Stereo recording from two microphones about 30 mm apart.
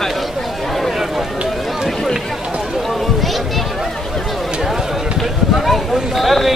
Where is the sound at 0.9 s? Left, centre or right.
Centre.